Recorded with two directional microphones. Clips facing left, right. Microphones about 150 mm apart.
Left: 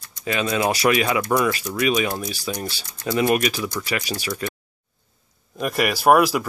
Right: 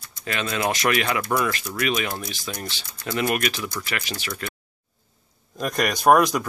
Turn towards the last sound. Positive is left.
turn(degrees=5)  # may be behind; listen again after turning